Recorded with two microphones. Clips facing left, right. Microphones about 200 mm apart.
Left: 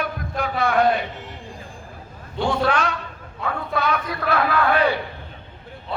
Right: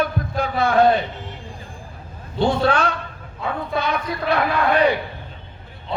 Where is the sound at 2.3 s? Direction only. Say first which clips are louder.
Right 3 dB; 30° right (ahead or behind).